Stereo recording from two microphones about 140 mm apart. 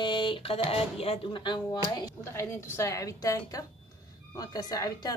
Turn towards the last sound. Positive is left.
turn(degrees=25)  # may be behind; listen again after turning